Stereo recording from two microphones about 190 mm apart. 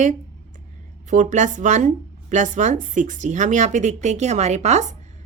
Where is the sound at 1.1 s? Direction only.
40° right (ahead or behind).